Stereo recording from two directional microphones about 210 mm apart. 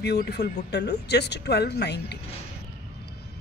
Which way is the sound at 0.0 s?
50° left (ahead or behind).